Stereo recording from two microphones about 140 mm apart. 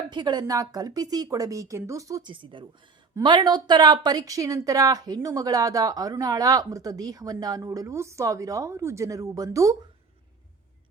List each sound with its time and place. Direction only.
0.1 s a woman's voice: 30° right (ahead or behind)